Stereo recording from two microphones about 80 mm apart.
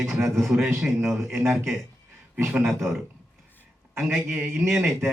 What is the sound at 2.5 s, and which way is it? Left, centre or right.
Speech, centre.